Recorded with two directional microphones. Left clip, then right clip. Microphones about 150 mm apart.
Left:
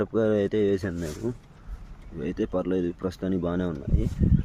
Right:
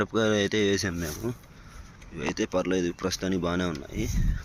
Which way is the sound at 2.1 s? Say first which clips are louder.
Right 1 dB; 40° left (ahead or behind).